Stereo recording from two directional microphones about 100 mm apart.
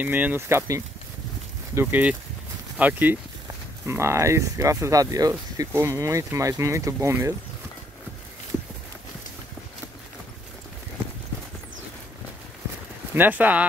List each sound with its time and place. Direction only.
0.0 s speech: 15° right (ahead or behind)
1.8 s speech: 15° right (ahead or behind)
13.1 s speech: 20° right (ahead or behind)